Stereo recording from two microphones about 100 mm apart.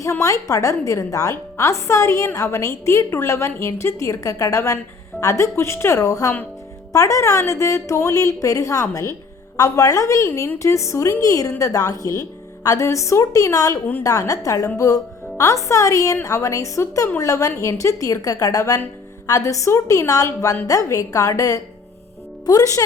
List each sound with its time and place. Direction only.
0.0 s speech: 35° left (ahead or behind)